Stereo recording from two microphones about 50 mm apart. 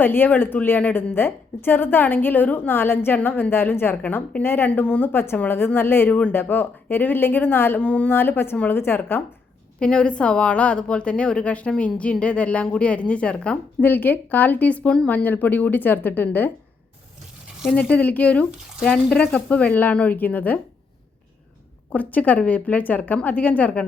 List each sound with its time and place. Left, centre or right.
0.0 s a woman's voice: left
3.9 s a woman's voice: left
4.4 s a woman's voice: left
4.7 s a woman's voice: left
6.1 s a woman's voice: left
6.3 s speech: left
7.8 s a woman's voice: left
8.1 s a woman's voice: left
9.8 s a woman's voice: centre
13.8 s speech: left
17.7 s a woman's voice: left
21.9 s speech: left